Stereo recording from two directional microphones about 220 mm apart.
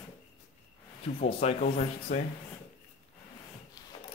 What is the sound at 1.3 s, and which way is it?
Speech, 30° left (ahead or behind).